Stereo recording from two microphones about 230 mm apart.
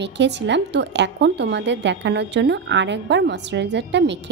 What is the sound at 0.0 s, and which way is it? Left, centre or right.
A woman's voice, right.